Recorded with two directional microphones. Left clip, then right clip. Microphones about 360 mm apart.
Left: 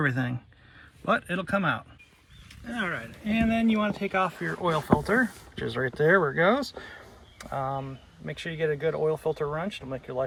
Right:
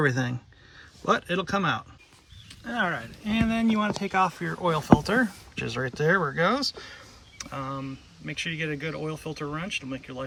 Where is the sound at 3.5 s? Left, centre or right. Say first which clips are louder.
Left 1 dB; right.